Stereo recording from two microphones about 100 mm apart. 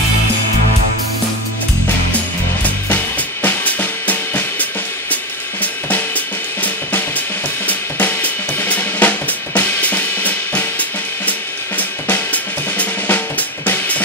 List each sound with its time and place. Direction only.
3.4 s drum kit: 15° left (ahead or behind)